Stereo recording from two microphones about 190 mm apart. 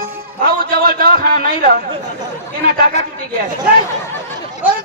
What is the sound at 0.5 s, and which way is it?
A man's voice, 50° right (ahead or behind).